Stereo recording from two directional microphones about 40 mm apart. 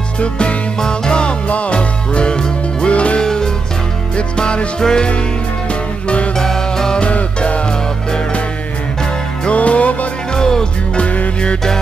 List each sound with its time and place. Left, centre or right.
0.2 s music: left
0.7 s music: centre
3.2 s music: centre
6.3 s music: centre
7.0 s music: left
9.5 s music: left
10.3 s music: centre
11.0 s music: left